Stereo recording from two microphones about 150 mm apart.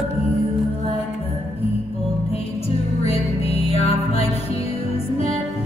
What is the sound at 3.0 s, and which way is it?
Music, 40° left (ahead or behind).